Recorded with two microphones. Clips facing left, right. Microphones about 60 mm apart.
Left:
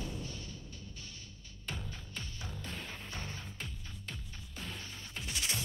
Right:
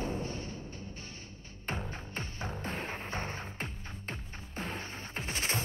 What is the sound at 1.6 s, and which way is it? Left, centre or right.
Music, right.